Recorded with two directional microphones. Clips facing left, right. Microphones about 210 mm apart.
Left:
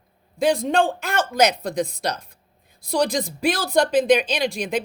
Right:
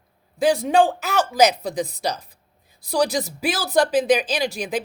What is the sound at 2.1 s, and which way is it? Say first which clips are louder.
Speech: right 1 dB; 60° left (ahead or behind).